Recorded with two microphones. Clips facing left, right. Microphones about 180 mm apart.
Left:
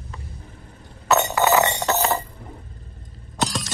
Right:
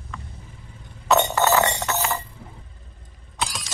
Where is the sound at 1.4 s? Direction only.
20° left (ahead or behind).